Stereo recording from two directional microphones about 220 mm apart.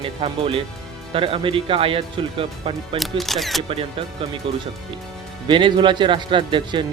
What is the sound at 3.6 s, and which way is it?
Speech, 25° right (ahead or behind).